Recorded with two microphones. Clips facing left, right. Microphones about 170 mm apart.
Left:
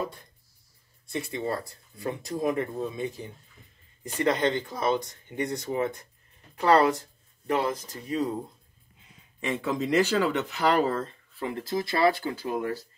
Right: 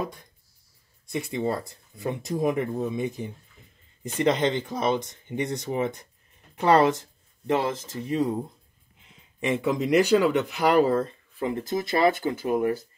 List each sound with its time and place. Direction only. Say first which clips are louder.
1.3 s speech: right 4 dB; 20° right (ahead or behind)
9.4 s speech: right 4 dB; 15° right (ahead or behind)